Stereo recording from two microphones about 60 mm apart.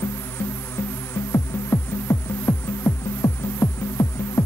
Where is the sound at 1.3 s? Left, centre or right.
Left.